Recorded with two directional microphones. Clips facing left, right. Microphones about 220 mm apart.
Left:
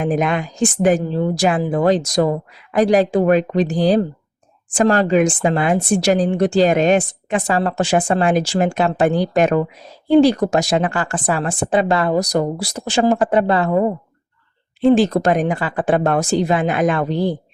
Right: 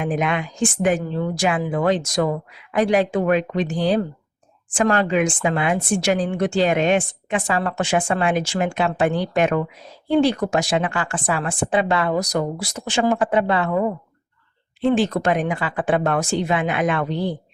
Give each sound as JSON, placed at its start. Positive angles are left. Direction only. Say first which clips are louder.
{"t": 0.0, "sound": "a woman's voice", "louder": "left 4 dB", "side_deg": 40}